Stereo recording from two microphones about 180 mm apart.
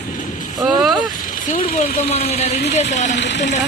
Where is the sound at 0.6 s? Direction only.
Centre (ahead or behind).